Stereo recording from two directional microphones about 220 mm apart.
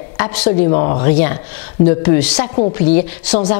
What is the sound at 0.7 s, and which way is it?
Speech, 30° left (ahead or behind).